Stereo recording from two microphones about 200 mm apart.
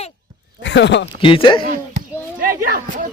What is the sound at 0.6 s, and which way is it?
Speech, 60° left (ahead or behind).